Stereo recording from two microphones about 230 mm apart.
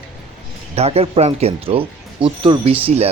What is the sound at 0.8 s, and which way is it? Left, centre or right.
Speech, right.